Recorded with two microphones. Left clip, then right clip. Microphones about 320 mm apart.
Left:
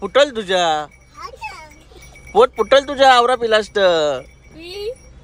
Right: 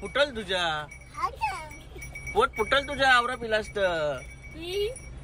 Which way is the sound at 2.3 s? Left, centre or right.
Centre.